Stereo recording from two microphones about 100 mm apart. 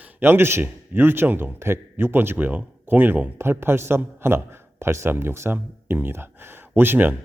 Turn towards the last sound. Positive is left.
turn(degrees=-20)  # may be behind; listen again after turning